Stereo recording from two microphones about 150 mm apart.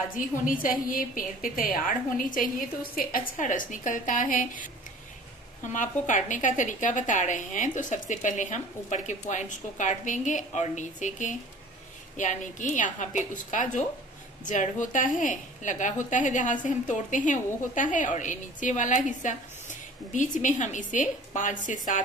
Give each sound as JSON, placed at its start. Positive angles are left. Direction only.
{"t": 0.1, "sound": "a woman's voice", "side_deg": 65}
{"t": 5.7, "sound": "a woman's voice", "side_deg": 55}